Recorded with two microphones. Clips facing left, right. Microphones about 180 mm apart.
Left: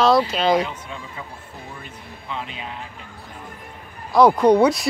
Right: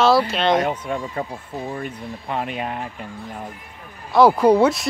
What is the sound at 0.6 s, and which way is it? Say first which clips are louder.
Speech: right 5 dB; 55° right (ahead or behind).